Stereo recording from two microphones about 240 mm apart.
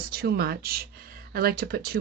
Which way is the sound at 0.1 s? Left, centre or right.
Right.